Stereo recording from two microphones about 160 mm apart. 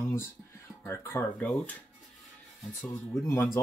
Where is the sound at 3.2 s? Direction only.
20° left (ahead or behind).